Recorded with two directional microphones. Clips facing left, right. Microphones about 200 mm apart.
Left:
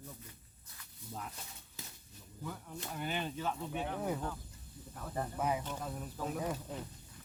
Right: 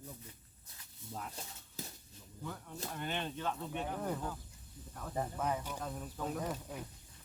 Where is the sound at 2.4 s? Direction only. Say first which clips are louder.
Even; 5° left (ahead or behind).